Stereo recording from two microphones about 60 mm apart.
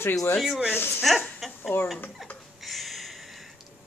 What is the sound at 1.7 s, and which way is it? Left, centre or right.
Speech, left.